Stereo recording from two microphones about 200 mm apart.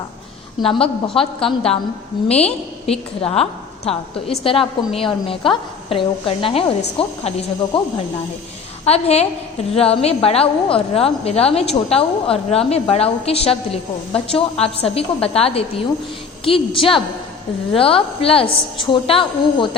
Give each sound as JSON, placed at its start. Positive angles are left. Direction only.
{"t": 0.6, "sound": "a woman's voice", "side_deg": 25}